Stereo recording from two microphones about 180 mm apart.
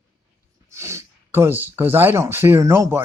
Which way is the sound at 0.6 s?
15° right (ahead or behind).